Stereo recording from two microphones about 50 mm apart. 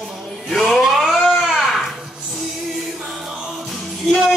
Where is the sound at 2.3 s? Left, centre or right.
Centre.